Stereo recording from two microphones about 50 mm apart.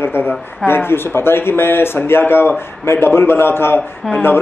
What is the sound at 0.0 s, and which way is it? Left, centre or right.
A woman's voice, left.